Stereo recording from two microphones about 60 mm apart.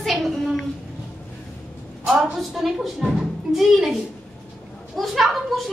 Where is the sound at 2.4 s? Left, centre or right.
Centre.